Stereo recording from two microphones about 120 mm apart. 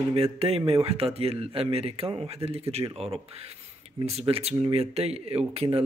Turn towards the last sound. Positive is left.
turn(degrees=-60)  # may be behind; listen again after turning